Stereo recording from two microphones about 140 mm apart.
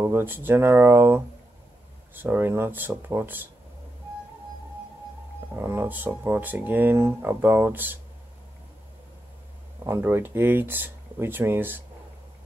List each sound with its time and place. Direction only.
0.0 s speech: 15° right (ahead or behind)
5.6 s speech: 15° right (ahead or behind)
9.8 s speech: 20° right (ahead or behind)